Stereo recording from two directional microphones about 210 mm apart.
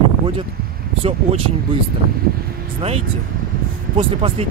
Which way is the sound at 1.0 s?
25° right (ahead or behind).